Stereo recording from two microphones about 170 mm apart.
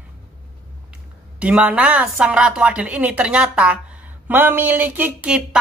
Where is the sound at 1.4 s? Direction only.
5° right (ahead or behind).